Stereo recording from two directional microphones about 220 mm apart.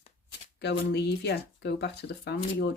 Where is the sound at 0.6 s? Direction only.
50° left (ahead or behind).